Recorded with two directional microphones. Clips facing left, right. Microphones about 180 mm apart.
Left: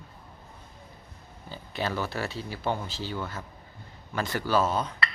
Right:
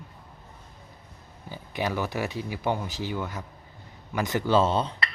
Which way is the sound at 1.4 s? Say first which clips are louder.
Right 2 dB; 15° right (ahead or behind).